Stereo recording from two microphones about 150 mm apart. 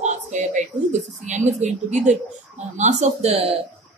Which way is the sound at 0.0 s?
55° right (ahead or behind).